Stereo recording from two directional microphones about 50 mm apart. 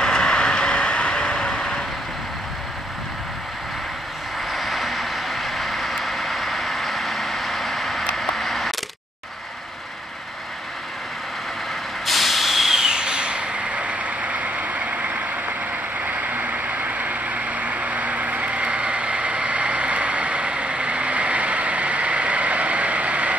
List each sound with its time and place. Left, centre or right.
0.0 s vehicle: centre
4.5 s vehicle: centre
8.2 s a sound: centre
12.1 s vehicle: centre; by 23.3 s right